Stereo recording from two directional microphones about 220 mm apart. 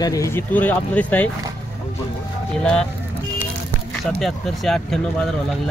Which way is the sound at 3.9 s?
5° left (ahead or behind).